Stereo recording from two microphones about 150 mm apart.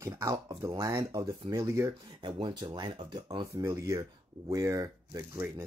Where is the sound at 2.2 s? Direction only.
30° right (ahead or behind).